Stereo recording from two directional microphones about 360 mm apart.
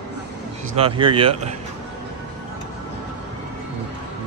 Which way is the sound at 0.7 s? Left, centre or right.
Centre.